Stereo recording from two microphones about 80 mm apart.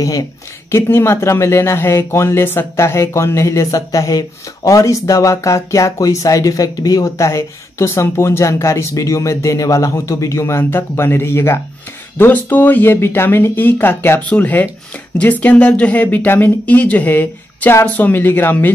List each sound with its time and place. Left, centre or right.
0.0 s speech: left
0.7 s speech: left